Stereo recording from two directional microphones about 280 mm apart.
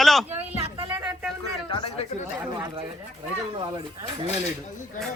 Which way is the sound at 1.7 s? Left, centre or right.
Centre.